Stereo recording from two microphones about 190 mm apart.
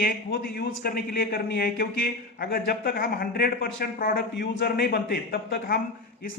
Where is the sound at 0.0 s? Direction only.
50° left (ahead or behind).